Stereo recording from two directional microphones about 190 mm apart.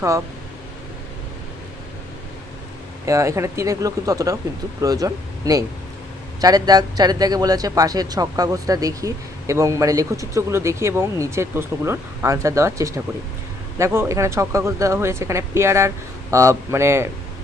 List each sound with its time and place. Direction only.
3.1 s speech: 15° right (ahead or behind)